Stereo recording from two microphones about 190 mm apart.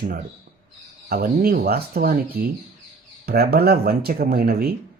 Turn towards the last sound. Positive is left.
turn(degrees=-55)  # may be behind; listen again after turning